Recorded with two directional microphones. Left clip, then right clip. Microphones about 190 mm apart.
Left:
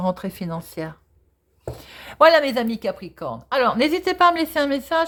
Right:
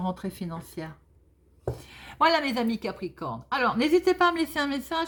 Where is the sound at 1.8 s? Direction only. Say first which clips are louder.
Left 9 dB; 40° left (ahead or behind).